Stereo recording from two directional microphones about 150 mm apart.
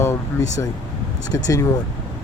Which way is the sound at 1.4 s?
25° left (ahead or behind).